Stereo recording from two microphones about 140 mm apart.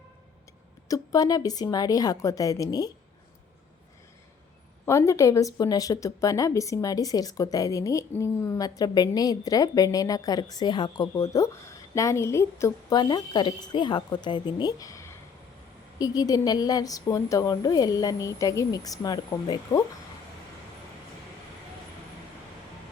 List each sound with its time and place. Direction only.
0.9 s speech: 25° left (ahead or behind)
4.9 s a woman's voice: 20° left (ahead or behind)
11.1 s speech: 20° left (ahead or behind)